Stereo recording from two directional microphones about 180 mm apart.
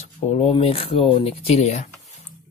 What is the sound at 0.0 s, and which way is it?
Speech, 40° left (ahead or behind).